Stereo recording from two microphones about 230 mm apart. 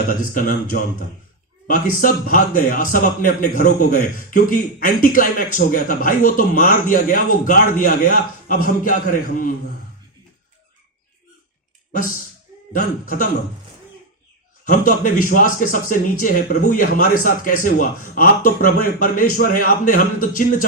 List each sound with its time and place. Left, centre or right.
0.1 s a man's voice: left
12.7 s a man's voice: left
14.6 s a man's voice: left